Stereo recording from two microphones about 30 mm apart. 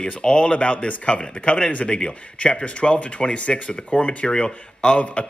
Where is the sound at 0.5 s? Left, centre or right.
Left.